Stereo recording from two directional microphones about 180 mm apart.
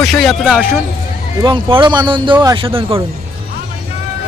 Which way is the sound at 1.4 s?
25° right (ahead or behind).